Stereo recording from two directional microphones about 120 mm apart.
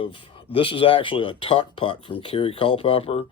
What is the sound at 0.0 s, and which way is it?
Speech, 45° left (ahead or behind).